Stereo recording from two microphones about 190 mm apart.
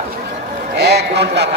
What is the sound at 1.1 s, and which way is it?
Speech, 60° right (ahead or behind).